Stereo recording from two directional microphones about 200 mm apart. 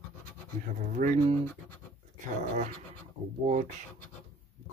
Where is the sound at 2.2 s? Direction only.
40° right (ahead or behind).